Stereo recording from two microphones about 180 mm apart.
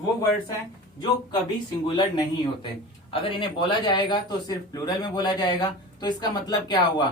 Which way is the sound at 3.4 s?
25° left (ahead or behind).